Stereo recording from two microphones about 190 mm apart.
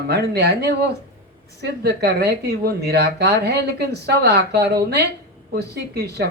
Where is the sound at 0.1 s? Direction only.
60° right (ahead or behind).